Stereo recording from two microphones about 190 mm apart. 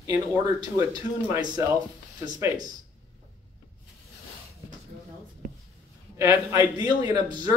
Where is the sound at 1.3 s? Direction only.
20° right (ahead or behind).